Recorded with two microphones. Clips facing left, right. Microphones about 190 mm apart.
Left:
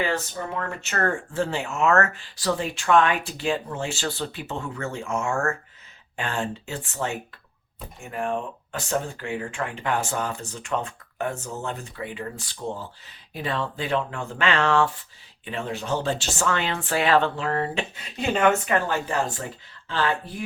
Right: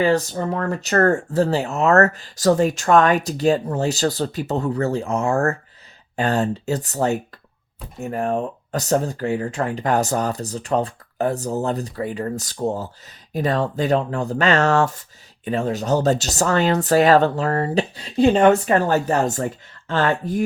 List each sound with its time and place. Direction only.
0.0 s speech: 40° right (ahead or behind)